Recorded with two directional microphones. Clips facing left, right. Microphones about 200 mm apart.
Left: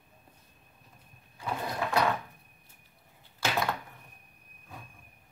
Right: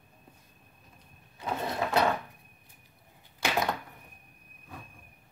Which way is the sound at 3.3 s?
20° right (ahead or behind).